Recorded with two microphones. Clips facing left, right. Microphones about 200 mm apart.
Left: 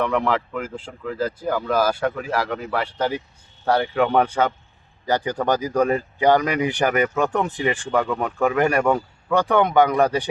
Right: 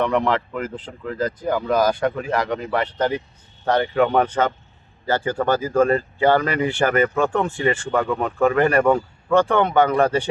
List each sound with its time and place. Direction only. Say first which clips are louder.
0.0 s speech: right 1 dB; 5° left (ahead or behind)
8.0 s speech: right 2 dB; 5° right (ahead or behind)
8.5 s speech: right 2 dB; 10° left (ahead or behind)